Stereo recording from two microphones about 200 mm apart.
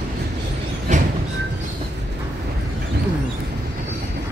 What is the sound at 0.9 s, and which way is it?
Train, 35° right (ahead or behind).